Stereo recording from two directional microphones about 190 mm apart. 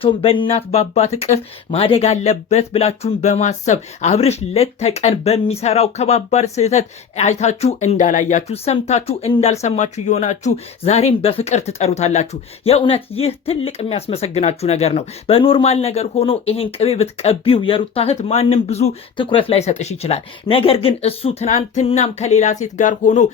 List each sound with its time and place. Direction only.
0.0 s speech: 30° left (ahead or behind)